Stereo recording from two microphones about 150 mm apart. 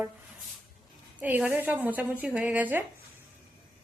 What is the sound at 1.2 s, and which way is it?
A woman's voice, 10° right (ahead or behind).